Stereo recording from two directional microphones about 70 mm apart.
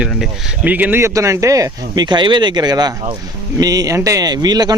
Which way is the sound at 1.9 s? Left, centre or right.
Right.